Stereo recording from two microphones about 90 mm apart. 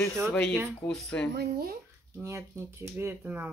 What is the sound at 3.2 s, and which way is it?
Speech, 15° right (ahead or behind).